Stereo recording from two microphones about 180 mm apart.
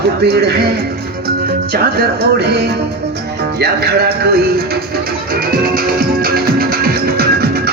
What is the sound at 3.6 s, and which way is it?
Speech, 65° right (ahead or behind).